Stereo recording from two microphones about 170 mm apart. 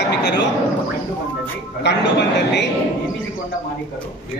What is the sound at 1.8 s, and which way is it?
Speech, 90° left.